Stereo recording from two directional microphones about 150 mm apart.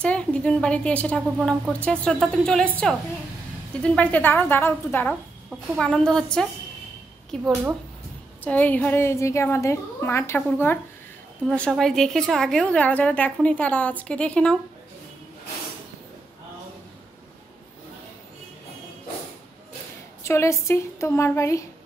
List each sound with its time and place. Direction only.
0.0 s a woman's voice: 5° left (ahead or behind)
3.8 s a woman's voice: 10° left (ahead or behind)
5.8 s a woman's voice: 5° left (ahead or behind)
20.2 s a woman's voice: 20° left (ahead or behind)